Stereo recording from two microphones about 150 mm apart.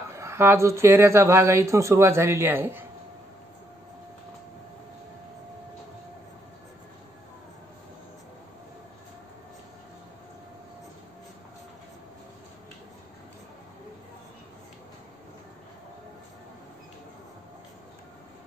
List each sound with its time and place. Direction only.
0.1 s speech: 20° right (ahead or behind)